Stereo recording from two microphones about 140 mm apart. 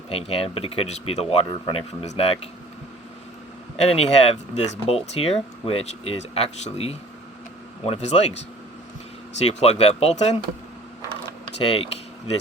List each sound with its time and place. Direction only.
0.1 s speech: 45° left (ahead or behind)
3.8 s speech: 45° left (ahead or behind)
9.5 s speech: 45° left (ahead or behind)
11.5 s speech: 45° left (ahead or behind)